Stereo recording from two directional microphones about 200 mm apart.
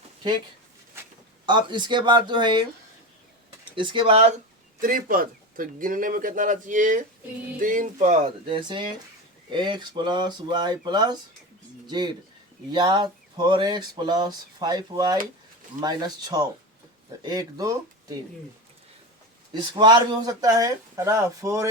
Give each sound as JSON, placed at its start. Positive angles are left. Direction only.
{"t": 1.5, "sound": "speech", "side_deg": -25}
{"t": 3.8, "sound": "speech", "side_deg": -25}
{"t": 4.8, "sound": "a man's voice", "side_deg": -45}
{"t": 19.7, "sound": "speech", "side_deg": -25}